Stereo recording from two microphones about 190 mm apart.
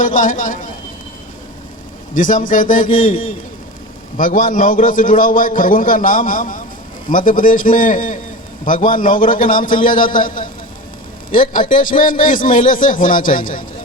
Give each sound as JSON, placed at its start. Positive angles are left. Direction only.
{"t": 0.0, "sound": "a man's voice", "side_deg": 45}
{"t": 2.1, "sound": "a man's voice", "side_deg": 45}